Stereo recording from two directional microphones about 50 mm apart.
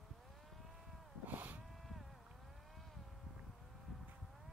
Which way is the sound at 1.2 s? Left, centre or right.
Right.